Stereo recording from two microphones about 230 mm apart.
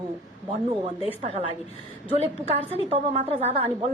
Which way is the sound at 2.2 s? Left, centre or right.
Right.